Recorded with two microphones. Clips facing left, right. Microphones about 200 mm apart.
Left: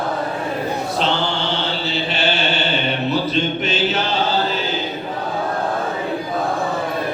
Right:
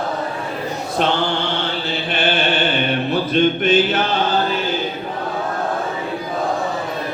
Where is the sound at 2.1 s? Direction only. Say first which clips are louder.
Right 3 dB; 55° right (ahead or behind).